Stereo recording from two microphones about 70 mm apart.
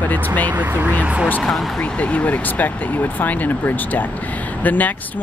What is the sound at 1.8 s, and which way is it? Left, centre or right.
Speech, centre.